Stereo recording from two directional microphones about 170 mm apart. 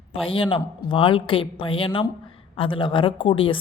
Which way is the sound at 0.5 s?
30° left (ahead or behind).